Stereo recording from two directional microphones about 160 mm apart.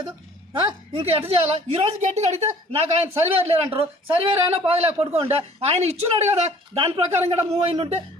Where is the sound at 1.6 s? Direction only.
45° right (ahead or behind).